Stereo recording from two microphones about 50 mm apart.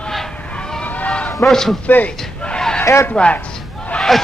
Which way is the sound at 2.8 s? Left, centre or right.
Left.